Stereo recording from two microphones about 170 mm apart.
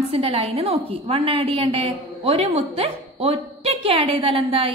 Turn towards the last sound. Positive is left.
turn(degrees=-30)  # may be behind; listen again after turning